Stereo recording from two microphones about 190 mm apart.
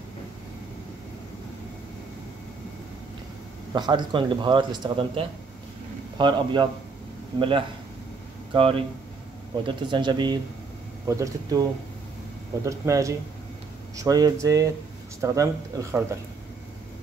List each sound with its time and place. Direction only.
3.7 s speech: 25° right (ahead or behind)
12.6 s speech: 15° right (ahead or behind)